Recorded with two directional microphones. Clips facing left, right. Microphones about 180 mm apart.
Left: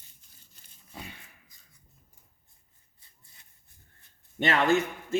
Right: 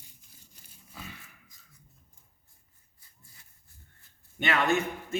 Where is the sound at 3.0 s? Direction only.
25° left (ahead or behind).